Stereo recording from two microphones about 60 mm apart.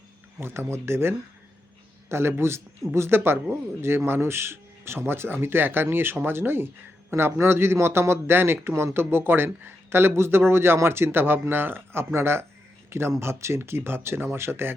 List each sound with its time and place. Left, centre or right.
0.3 s a man's voice: right